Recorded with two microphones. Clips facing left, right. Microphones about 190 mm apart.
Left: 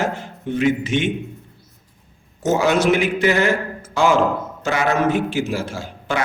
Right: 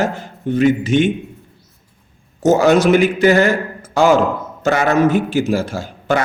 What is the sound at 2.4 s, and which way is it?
A man's voice, 40° right (ahead or behind).